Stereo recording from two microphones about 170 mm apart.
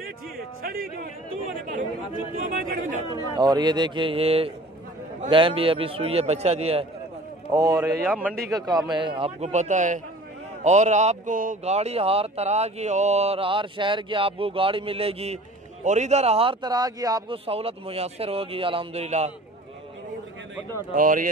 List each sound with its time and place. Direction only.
0.6 s a man's voice: 60° right (ahead or behind)
3.1 s speech: 25° left (ahead or behind)
3.3 s a man's voice: 25° right (ahead or behind)
7.5 s a man's voice: 20° right (ahead or behind)
8.1 s a man's voice: 10° right (ahead or behind)
8.5 s speech: 20° right (ahead or behind)
17.5 s speech: 35° right (ahead or behind)
20.9 s speech: 55° right (ahead or behind)